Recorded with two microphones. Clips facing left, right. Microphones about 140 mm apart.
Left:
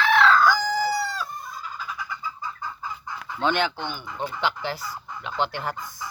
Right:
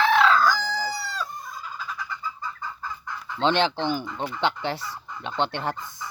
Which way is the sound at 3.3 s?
25° right (ahead or behind).